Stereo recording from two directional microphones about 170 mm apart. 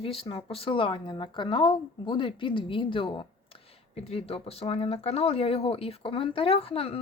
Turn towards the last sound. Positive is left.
turn(degrees=35)  # may be behind; listen again after turning